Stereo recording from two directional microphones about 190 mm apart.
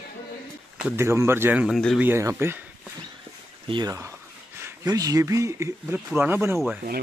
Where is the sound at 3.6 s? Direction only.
20° right (ahead or behind).